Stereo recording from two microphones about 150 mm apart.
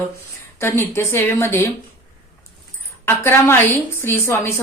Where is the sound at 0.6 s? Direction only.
15° left (ahead or behind).